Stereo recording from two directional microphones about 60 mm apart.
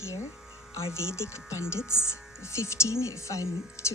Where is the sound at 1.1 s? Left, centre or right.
Left.